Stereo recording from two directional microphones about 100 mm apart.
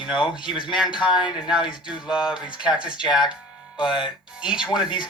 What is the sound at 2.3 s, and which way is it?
Speech, 50° left (ahead or behind).